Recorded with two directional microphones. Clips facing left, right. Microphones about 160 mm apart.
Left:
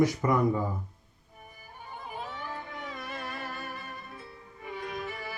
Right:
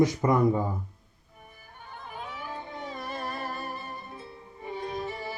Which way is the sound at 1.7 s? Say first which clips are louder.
Left 1 dB; 5° left (ahead or behind).